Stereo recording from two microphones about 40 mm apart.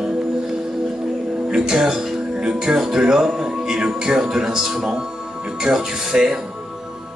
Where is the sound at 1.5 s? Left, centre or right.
Centre.